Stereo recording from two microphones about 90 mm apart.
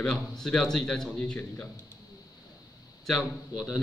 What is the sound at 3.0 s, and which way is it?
Speech, centre (ahead or behind).